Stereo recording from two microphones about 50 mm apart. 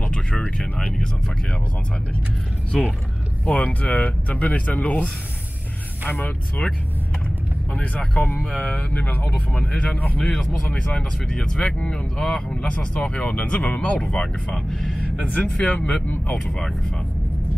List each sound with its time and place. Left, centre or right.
0.0 s a sound: centre
0.6 s speech: centre
2.7 s speech: centre
3.4 s speech: left
6.1 s speech: left
7.7 s speech: left
10.2 s speech: centre
13.0 s speech: left
14.7 s speech: centre
15.0 s speech: left